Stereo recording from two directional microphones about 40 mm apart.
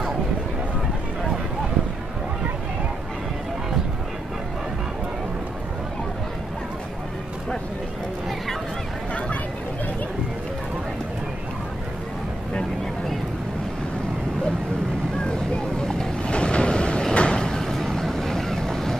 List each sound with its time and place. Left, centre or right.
16.2 s train: left
17.1 s vehicle: left